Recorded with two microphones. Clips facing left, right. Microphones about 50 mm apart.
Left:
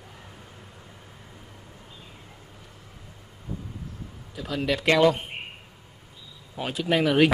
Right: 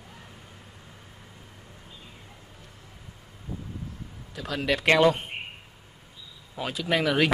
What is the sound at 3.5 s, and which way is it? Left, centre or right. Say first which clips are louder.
Vehicle: left 1 dB; centre.